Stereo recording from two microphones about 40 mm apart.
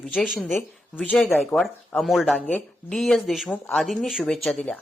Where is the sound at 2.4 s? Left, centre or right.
Left.